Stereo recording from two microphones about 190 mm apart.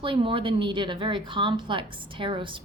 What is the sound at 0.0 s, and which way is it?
A woman's voice, 25° right (ahead or behind).